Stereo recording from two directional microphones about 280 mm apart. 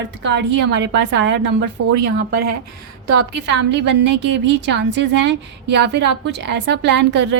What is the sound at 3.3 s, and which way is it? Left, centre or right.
A woman's voice, right.